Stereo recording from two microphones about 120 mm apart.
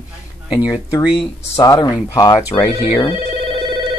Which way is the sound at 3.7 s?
40° right (ahead or behind).